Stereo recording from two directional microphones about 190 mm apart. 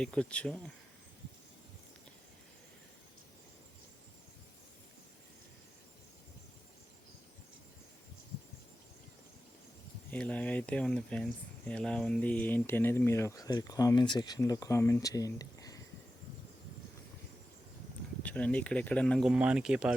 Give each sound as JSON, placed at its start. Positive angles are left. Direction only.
{"t": 0.0, "sound": "speech", "side_deg": 5}
{"t": 10.1, "sound": "speech", "side_deg": 5}
{"t": 18.2, "sound": "speech", "side_deg": 5}